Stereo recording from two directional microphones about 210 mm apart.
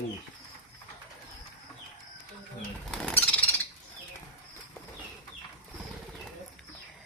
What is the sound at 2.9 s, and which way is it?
Bird flight, 5° left (ahead or behind).